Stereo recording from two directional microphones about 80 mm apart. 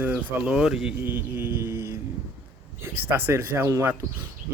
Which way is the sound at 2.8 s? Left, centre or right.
Right.